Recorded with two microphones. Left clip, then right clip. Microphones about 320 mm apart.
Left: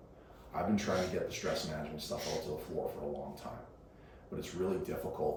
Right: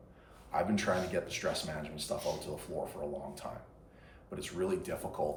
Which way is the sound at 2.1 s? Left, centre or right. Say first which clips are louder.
Right 2 dB; left.